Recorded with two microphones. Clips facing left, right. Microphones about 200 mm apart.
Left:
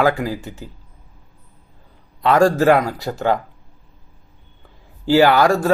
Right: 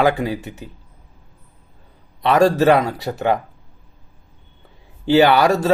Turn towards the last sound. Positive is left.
turn(degrees=-20)  # may be behind; listen again after turning